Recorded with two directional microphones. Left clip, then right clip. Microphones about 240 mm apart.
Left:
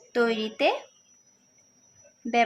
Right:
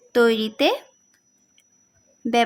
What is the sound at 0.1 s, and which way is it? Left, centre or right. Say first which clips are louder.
Speech: right 7 dB; right.